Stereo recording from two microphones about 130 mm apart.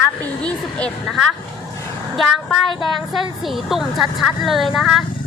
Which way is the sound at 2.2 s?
Centre (ahead or behind).